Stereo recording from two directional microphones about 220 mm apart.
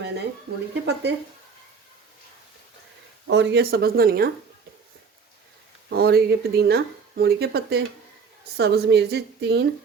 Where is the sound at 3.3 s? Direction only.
50° right (ahead or behind).